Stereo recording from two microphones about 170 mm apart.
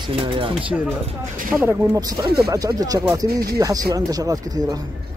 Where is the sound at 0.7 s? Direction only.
10° right (ahead or behind).